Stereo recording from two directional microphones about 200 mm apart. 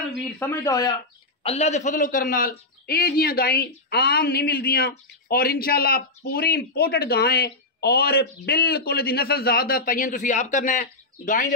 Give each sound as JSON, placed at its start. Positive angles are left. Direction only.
{"t": 0.4, "sound": "speech", "side_deg": 15}
{"t": 1.4, "sound": "a man's voice", "side_deg": 30}